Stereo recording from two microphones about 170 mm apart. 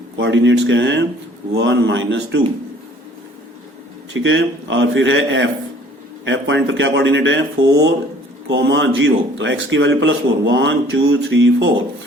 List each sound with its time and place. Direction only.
0.3 s speech: 90° right
4.1 s speech: 90° right